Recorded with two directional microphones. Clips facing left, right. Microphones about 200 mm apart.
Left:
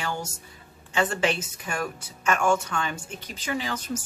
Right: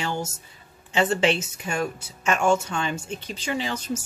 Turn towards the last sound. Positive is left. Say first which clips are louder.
# right 2 dB
turn(degrees=-25)  # may be behind; listen again after turning